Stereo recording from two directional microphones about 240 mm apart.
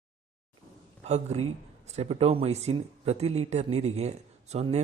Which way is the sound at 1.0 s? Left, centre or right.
Right.